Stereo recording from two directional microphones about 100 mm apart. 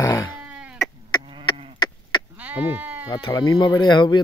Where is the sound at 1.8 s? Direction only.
45° left (ahead or behind).